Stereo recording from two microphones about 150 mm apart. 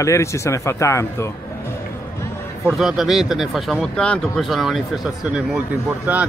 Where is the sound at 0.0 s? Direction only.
20° left (ahead or behind).